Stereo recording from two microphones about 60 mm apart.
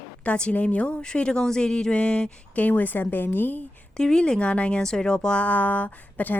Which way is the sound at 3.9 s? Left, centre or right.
Centre.